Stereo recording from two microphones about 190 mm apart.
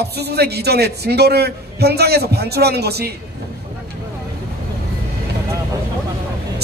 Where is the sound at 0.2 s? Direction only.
60° right (ahead or behind).